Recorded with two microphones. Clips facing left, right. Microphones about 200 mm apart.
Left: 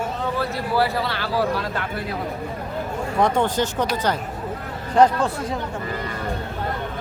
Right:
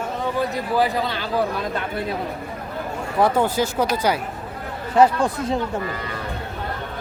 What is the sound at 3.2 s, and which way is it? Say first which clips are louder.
A man's voice: right 1 dB; 5° right (ahead or behind).